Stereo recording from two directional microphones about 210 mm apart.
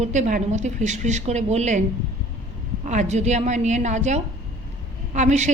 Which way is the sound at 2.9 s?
35° right (ahead or behind).